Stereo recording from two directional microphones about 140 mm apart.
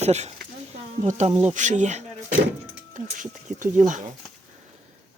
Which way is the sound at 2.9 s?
65° right (ahead or behind).